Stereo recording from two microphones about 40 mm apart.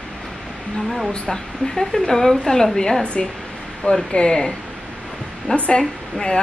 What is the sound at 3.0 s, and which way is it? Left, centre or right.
A woman's voice, left.